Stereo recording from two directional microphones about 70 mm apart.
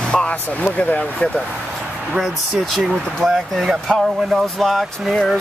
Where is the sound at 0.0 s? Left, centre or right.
Centre.